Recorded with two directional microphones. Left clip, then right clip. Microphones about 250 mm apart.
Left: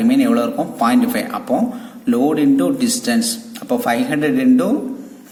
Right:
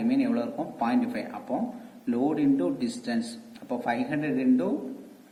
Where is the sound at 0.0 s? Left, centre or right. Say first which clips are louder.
Left 12 dB; left.